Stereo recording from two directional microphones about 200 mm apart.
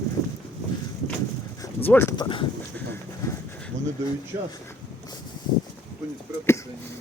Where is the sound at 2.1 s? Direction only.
25° left (ahead or behind).